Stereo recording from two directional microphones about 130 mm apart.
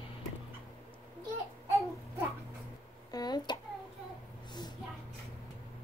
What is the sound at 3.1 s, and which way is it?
Speech, 30° left (ahead or behind).